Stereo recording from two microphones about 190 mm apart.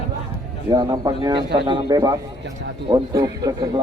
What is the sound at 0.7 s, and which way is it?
A man's voice, 20° right (ahead or behind).